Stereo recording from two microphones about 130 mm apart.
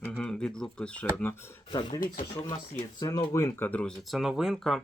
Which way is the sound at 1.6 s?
35° left (ahead or behind).